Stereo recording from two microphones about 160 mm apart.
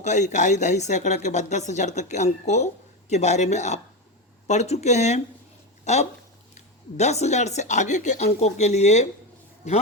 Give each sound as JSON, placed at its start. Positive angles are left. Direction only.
{"t": 0.0, "sound": "speech", "side_deg": 45}